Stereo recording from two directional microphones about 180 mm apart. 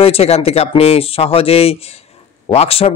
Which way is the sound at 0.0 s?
35° left (ahead or behind).